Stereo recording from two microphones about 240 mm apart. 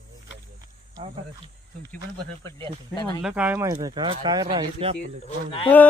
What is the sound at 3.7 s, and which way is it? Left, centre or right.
Speech, centre.